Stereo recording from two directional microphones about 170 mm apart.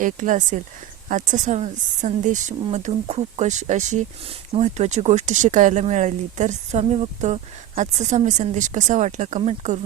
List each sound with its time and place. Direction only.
0.0 s speech: 50° right (ahead or behind)